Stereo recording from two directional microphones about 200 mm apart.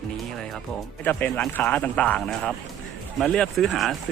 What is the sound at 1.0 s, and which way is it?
Speech, 10° left (ahead or behind).